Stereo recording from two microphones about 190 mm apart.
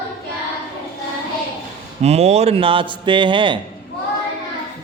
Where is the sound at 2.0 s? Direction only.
35° right (ahead or behind).